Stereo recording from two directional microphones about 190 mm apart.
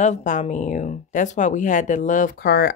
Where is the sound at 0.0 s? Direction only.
40° left (ahead or behind).